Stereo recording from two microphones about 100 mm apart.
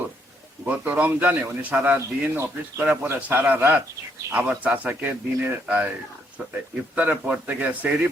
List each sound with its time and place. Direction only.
0.6 s a man's voice: 15° right (ahead or behind)